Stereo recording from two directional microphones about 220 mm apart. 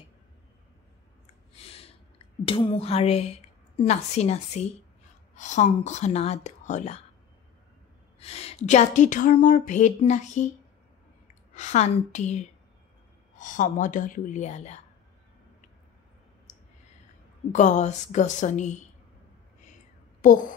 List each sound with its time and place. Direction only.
1.5 s a sound: 25° left (ahead or behind)
3.8 s a woman's voice: 30° left (ahead or behind)
8.2 s a woman's voice: 25° left (ahead or behind)
11.5 s a woman's voice: 30° left (ahead or behind)
17.5 s a woman's voice: 35° left (ahead or behind)
20.2 s a woman's voice: 35° left (ahead or behind)